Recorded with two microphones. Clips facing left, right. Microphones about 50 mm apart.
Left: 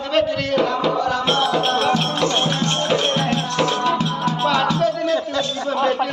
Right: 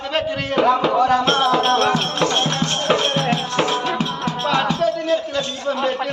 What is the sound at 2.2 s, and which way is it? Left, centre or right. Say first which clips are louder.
Music: even; right.